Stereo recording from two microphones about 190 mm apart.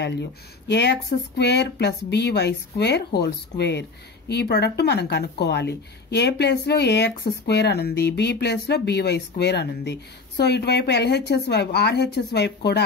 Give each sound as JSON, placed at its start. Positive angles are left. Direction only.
{"t": 0.0, "sound": "speech", "side_deg": 65}